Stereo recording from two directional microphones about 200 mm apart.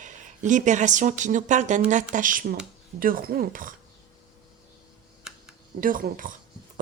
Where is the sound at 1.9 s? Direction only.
40° right (ahead or behind).